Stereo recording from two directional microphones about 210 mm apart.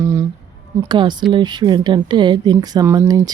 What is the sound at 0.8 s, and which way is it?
Speech, 20° right (ahead or behind).